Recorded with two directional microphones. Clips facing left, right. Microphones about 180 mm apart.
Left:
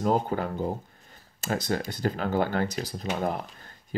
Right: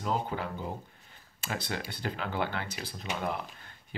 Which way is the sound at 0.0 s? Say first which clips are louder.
Left 7 dB; 45° left (ahead or behind).